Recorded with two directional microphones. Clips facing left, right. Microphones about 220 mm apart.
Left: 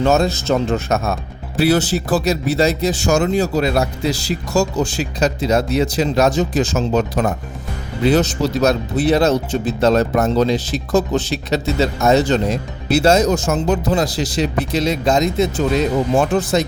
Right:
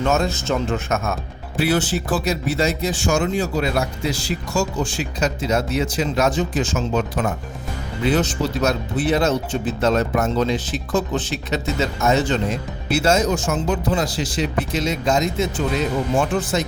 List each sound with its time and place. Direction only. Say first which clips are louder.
0.0 s speech: left 5 dB; 35° left (ahead or behind)